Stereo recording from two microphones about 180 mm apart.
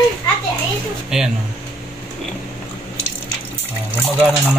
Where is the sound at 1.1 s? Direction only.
5° right (ahead or behind).